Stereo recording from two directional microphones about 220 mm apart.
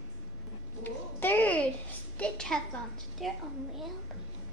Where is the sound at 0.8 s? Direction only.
10° left (ahead or behind).